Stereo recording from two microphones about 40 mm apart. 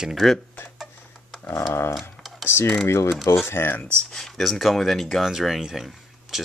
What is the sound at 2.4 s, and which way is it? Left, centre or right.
Speech, left.